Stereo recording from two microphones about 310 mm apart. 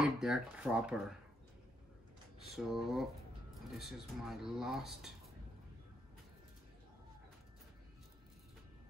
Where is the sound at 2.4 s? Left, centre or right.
Centre.